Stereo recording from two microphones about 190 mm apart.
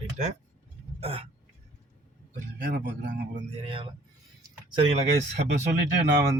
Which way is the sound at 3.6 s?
25° right (ahead or behind).